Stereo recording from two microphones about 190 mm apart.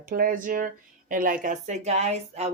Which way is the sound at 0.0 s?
50° right (ahead or behind).